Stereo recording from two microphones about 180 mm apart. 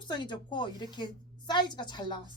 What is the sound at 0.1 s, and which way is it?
A woman's voice, 25° left (ahead or behind).